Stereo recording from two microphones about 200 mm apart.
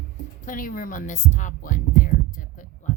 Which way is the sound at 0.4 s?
45° left (ahead or behind).